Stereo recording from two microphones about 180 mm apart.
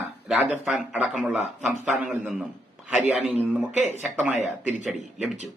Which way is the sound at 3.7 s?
40° left (ahead or behind).